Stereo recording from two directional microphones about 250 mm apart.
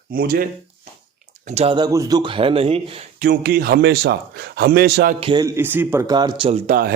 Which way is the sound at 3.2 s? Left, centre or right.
Right.